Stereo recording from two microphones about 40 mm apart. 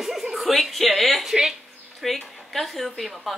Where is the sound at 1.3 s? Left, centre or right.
Centre.